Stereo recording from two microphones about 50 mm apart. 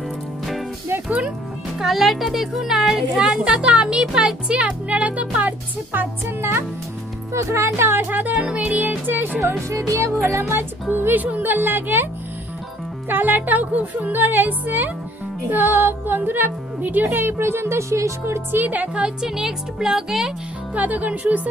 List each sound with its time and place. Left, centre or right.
1.8 s speech: centre; by 5.5 s right
5.9 s music: right
8.5 s speech: right
9.4 s music: right
10.5 s music: right
13.1 s speech: right
15.5 s music: right
16.9 s speech: right
17.4 s speech: right
18.6 s speech: right
19.0 s speech: centre
20.7 s speech: right